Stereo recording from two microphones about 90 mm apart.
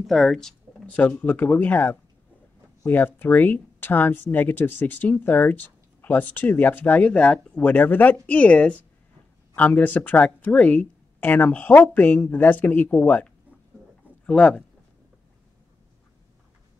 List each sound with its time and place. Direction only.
0.0 s speech: centre (ahead or behind)
0.9 s speech: 15° left (ahead or behind)